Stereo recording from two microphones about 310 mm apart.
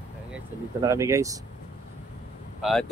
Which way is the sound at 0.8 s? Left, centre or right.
Centre.